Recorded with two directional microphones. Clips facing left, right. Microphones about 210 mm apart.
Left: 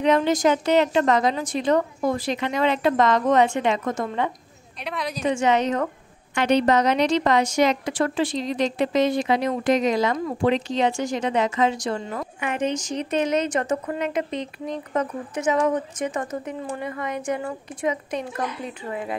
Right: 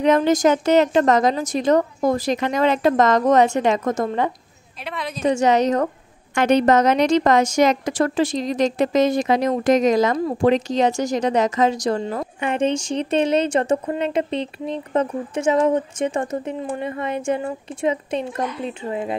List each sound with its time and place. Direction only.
0.0 s a woman's voice: 45° right (ahead or behind)
4.8 s a woman's voice: centre (ahead or behind)
5.2 s a woman's voice: 40° right (ahead or behind)